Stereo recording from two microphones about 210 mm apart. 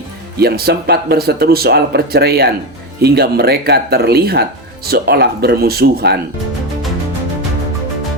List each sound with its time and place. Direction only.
0.3 s speech: 50° right (ahead or behind)